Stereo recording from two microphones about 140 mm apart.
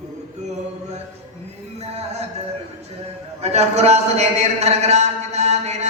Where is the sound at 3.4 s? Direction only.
50° right (ahead or behind).